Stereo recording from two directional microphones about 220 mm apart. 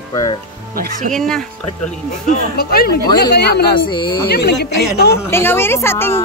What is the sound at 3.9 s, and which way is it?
Speech, 20° left (ahead or behind).